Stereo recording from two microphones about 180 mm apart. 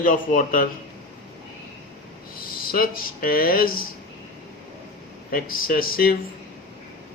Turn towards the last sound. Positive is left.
turn(degrees=55)  # may be behind; listen again after turning